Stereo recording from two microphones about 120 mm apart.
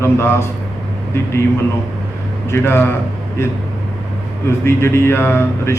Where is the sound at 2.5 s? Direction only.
20° left (ahead or behind).